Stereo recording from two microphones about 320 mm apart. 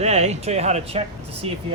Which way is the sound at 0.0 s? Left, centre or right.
Right.